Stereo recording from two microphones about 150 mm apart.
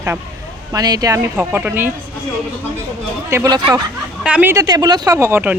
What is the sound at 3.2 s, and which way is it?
A man's voice, 15° right (ahead or behind).